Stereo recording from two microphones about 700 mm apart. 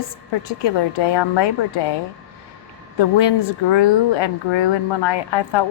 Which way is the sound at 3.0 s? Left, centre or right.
Left.